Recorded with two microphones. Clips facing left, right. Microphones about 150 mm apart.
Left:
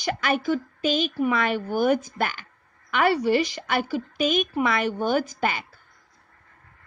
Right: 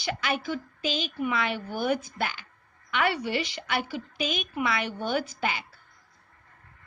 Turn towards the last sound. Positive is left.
turn(degrees=50)  # may be behind; listen again after turning